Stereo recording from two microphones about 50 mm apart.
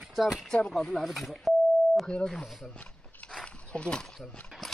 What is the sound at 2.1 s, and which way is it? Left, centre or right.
Speech, centre.